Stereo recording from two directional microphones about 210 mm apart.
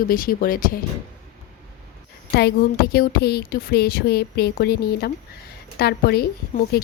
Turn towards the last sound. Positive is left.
turn(degrees=50)  # may be behind; listen again after turning